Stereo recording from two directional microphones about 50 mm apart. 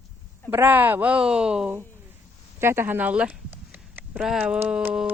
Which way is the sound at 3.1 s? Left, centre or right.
Right.